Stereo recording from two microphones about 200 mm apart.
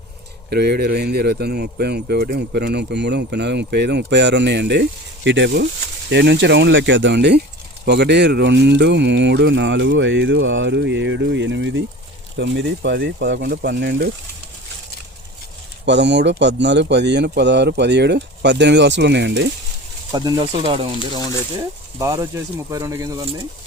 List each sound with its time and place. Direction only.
0.5 s speech: 55° right (ahead or behind)
15.9 s speech: 60° right (ahead or behind)
20.1 s speech: 20° right (ahead or behind)
21.9 s speech: 15° right (ahead or behind)